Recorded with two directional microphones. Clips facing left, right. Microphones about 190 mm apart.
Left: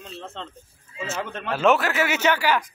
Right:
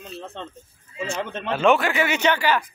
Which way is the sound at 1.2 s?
25° right (ahead or behind).